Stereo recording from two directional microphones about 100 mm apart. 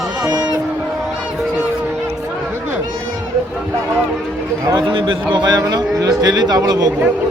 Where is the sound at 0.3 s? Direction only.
40° right (ahead or behind).